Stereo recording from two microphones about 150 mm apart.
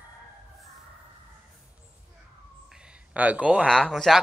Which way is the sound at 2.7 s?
5° right (ahead or behind).